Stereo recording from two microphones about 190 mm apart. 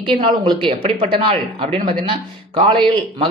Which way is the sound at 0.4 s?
30° right (ahead or behind).